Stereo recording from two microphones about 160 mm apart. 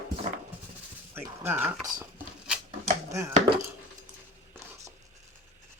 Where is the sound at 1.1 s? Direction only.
15° right (ahead or behind).